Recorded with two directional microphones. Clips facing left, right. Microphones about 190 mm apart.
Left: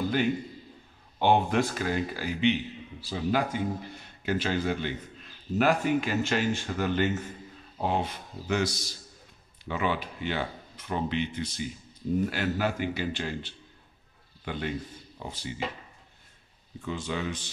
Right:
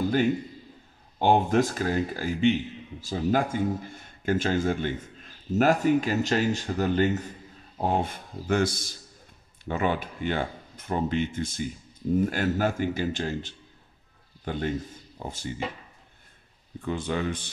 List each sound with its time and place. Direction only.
1.2 s a man's voice: 40° right (ahead or behind)
7.8 s a man's voice: 50° right (ahead or behind)
16.8 s speech: 55° right (ahead or behind)